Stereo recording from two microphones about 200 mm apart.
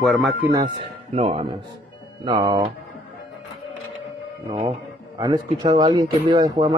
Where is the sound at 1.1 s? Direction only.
25° right (ahead or behind).